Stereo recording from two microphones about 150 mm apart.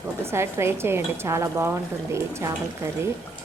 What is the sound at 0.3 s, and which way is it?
Speech, 15° right (ahead or behind).